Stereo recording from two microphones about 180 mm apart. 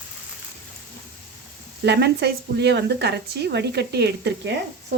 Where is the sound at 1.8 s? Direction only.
65° right (ahead or behind).